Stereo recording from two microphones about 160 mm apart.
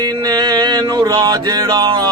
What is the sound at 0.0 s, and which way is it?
Music, 25° right (ahead or behind).